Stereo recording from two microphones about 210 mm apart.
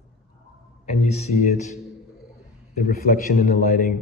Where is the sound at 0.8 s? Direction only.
30° left (ahead or behind).